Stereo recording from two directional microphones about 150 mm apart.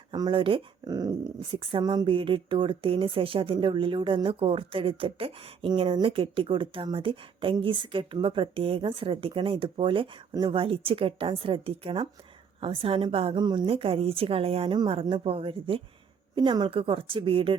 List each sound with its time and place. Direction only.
0.1 s speech: 30° right (ahead or behind)